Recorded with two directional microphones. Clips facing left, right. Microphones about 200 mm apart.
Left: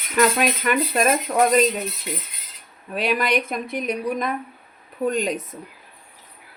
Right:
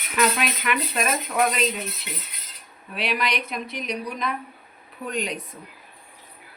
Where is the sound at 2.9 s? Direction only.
45° left (ahead or behind).